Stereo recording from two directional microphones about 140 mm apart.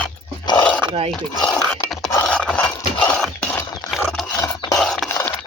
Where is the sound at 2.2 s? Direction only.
5° left (ahead or behind).